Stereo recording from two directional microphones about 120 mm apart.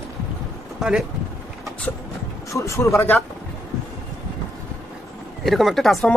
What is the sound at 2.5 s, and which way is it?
Speech, 25° left (ahead or behind).